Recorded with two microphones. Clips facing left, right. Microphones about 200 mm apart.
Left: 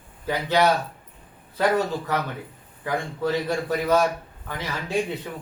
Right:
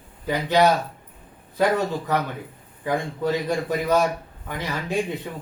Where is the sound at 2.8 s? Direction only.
15° right (ahead or behind).